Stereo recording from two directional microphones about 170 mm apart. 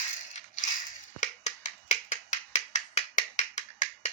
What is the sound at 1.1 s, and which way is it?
Finger snapping, 45° left (ahead or behind).